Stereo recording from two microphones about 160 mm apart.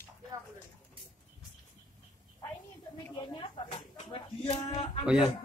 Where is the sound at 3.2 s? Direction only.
30° left (ahead or behind).